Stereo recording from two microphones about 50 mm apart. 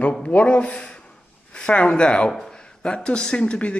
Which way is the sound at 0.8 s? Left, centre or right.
Centre.